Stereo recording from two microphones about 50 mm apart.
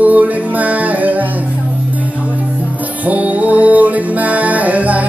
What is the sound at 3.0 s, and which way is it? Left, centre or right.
Music, right.